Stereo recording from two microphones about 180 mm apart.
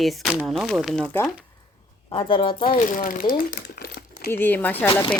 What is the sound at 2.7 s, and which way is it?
Speech, 50° left (ahead or behind).